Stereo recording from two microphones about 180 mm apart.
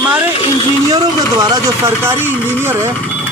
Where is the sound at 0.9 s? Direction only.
20° right (ahead or behind).